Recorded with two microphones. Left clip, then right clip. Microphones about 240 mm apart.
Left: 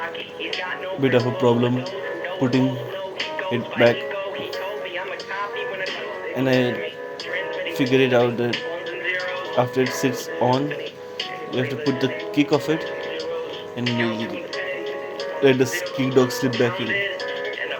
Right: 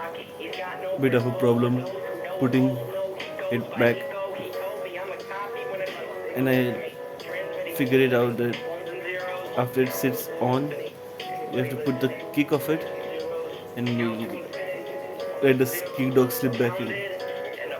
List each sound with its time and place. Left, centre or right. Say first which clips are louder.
1.0 s speech: left 4 dB; centre
6.3 s speech: left 3 dB; centre
7.8 s speech: left 3 dB; centre
9.6 s speech: left 4 dB; centre
11.9 s speech: left 4 dB; centre
13.8 s speech: left 4 dB; left
15.4 s speech: left 4 dB; centre
16.5 s speech: left 4 dB; left